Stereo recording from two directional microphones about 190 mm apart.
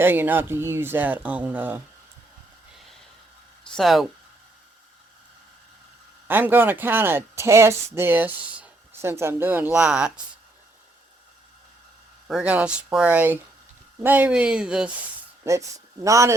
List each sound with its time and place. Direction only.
0.0 s speech: 10° right (ahead or behind)
3.8 s speech: centre (ahead or behind)
6.2 s speech: 10° right (ahead or behind)
12.3 s speech: 5° right (ahead or behind)
15.4 s speech: 15° right (ahead or behind)